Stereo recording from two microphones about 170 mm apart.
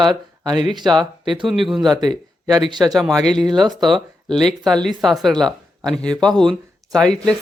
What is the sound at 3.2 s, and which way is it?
Speech, 5° left (ahead or behind).